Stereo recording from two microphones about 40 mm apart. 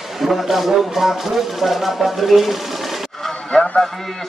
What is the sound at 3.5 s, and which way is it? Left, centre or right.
Speech, centre.